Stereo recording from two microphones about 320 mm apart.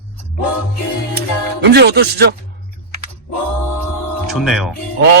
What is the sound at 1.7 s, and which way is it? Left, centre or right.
Speech, right.